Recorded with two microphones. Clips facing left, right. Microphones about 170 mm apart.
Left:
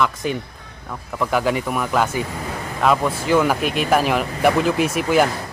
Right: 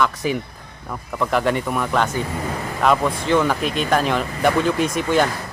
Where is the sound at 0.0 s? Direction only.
Centre (ahead or behind).